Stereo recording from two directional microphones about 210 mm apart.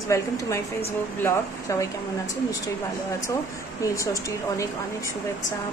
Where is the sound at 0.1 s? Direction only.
15° left (ahead or behind).